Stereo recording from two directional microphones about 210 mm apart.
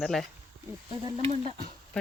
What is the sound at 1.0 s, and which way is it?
Speech, 30° right (ahead or behind).